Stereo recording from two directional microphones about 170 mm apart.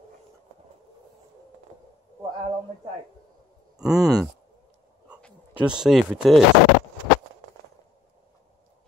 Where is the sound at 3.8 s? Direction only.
5° right (ahead or behind).